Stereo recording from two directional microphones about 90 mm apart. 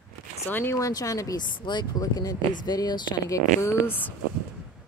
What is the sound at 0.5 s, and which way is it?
Speech, 20° left (ahead or behind).